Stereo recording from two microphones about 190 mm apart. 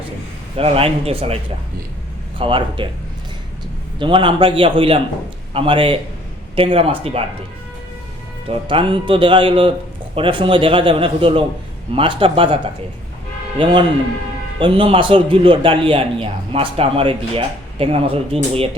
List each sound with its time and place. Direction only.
0.5 s a man's voice: 30° right (ahead or behind)
2.4 s a man's voice: 25° right (ahead or behind)
3.9 s a man's voice: 25° right (ahead or behind)
8.4 s a man's voice: 25° right (ahead or behind)
14.6 s a man's voice: 30° right (ahead or behind)